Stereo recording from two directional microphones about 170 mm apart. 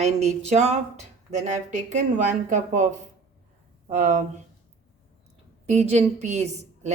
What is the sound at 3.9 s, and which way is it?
Speech, 45° right (ahead or behind).